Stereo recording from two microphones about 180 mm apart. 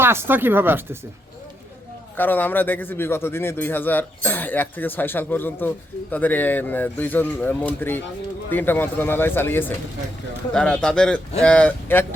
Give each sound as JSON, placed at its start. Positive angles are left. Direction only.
{"t": 0.0, "sound": "speech", "side_deg": -15}
{"t": 2.1, "sound": "speech", "side_deg": 10}